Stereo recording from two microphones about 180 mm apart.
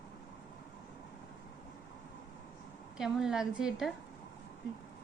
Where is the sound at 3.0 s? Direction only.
5° right (ahead or behind).